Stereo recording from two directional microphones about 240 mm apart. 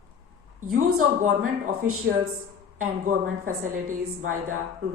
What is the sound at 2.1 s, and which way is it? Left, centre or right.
Speech, right.